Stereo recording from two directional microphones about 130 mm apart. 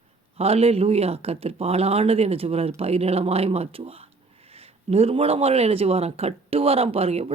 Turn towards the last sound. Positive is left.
turn(degrees=-50)  # may be behind; listen again after turning